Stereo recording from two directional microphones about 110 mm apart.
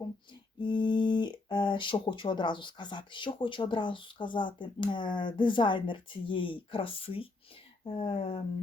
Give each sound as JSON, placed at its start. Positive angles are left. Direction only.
{"t": 0.6, "sound": "speech", "side_deg": 45}